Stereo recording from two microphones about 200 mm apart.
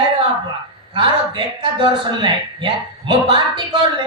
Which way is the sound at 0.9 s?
25° right (ahead or behind).